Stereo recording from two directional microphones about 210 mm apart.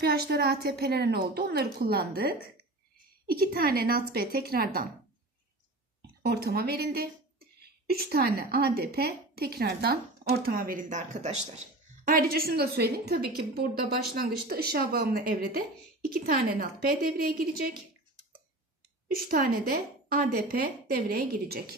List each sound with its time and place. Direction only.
0.0 s speech: 50° right (ahead or behind)
6.2 s speech: 50° right (ahead or behind)
19.0 s speech: 45° right (ahead or behind)